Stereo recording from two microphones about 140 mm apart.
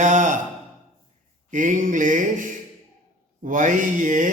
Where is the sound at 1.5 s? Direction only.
65° right (ahead or behind).